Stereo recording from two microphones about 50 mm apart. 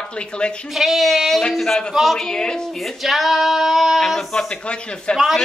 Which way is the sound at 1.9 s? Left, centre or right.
Centre.